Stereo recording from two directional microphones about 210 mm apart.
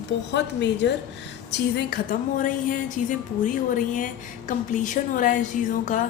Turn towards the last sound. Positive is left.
turn(degrees=40)  # may be behind; listen again after turning